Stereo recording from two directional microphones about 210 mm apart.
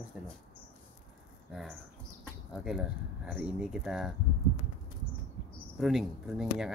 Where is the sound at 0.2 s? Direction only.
5° right (ahead or behind).